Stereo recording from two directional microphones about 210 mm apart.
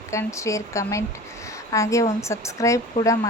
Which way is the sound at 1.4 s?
15° left (ahead or behind).